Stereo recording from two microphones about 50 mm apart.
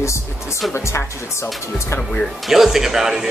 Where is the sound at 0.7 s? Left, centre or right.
Left.